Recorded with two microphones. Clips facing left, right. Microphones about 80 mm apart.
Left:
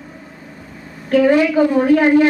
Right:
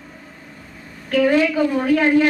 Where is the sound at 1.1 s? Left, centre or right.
Left.